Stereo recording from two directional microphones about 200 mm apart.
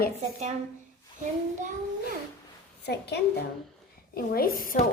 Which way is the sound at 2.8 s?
55° left (ahead or behind).